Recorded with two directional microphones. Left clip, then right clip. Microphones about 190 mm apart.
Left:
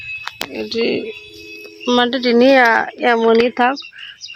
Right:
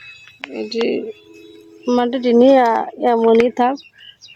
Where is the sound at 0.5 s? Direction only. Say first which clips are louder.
Even; 5° right (ahead or behind).